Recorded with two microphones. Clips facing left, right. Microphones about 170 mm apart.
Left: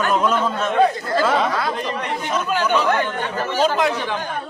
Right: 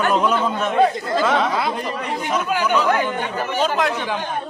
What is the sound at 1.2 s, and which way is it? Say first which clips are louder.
Speech: left 1 dB; centre (ahead or behind).